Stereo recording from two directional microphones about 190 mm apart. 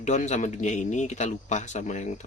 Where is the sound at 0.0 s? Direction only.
40° left (ahead or behind).